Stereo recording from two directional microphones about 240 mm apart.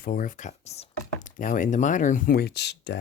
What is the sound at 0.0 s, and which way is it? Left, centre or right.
Speech, left.